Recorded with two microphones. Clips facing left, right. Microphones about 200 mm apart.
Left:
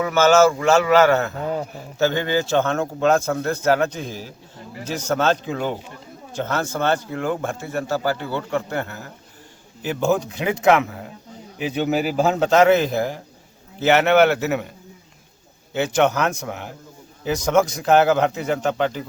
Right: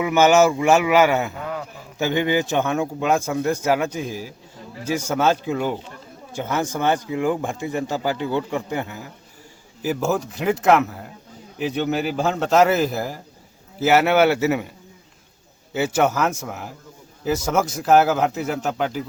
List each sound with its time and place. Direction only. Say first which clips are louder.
0.0 s a man's voice: even; 15° right (ahead or behind)
15.7 s a man's voice: left 1 dB; 5° right (ahead or behind)